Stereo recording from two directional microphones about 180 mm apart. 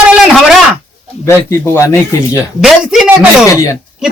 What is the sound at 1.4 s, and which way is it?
Speech, 15° left (ahead or behind).